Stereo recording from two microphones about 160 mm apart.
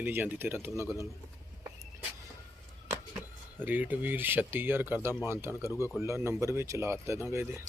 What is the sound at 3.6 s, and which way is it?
Speech, 10° right (ahead or behind).